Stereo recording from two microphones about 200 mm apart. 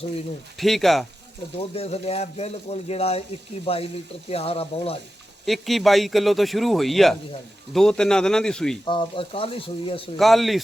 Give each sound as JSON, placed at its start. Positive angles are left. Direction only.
{"t": 0.5, "sound": "a man's voice", "side_deg": 0}
{"t": 1.5, "sound": "speech", "side_deg": 30}
{"t": 5.5, "sound": "a man's voice", "side_deg": 0}
{"t": 8.8, "sound": "speech", "side_deg": 20}
{"t": 10.2, "sound": "a man's voice", "side_deg": 0}